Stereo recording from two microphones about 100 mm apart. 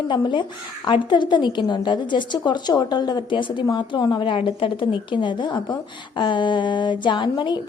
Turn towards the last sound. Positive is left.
turn(degrees=50)  # may be behind; listen again after turning